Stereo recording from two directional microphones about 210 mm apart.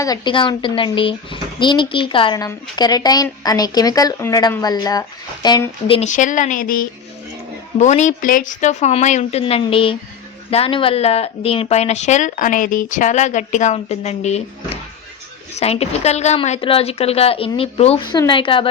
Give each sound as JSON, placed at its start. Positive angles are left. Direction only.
{"t": 0.0, "sound": "speech", "side_deg": 20}
{"t": 6.0, "sound": "speech", "side_deg": 35}
{"t": 15.5, "sound": "speech", "side_deg": 30}